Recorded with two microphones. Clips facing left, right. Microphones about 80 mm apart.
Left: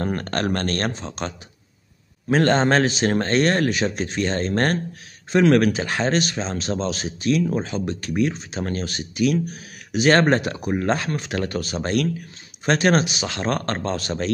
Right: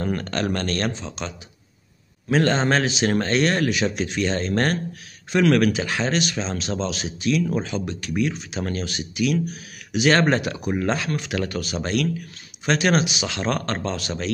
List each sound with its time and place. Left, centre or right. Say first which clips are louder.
0.0 s speech: left 1 dB; left